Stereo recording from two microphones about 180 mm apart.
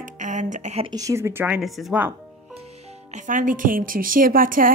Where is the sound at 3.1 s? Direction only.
45° right (ahead or behind).